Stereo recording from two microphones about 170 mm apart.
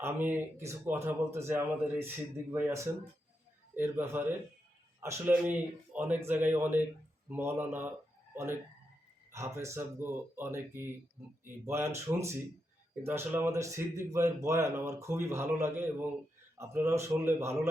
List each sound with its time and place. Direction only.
0.0 s speech: 15° right (ahead or behind)
5.5 s speech: 10° right (ahead or behind)
9.3 s speech: 15° right (ahead or behind)